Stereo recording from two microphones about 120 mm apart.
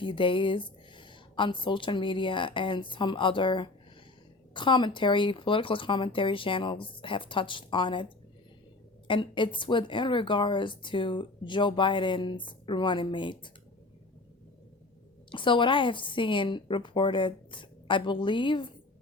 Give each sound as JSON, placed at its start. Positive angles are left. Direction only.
{"t": 0.0, "sound": "a woman's voice", "side_deg": 45}
{"t": 9.0, "sound": "a woman's voice", "side_deg": 40}
{"t": 15.3, "sound": "a woman's voice", "side_deg": 45}